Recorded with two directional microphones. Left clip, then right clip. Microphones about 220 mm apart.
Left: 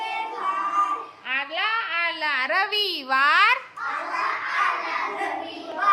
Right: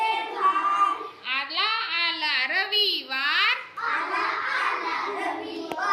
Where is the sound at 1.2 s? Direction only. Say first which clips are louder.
Even; 15° left (ahead or behind).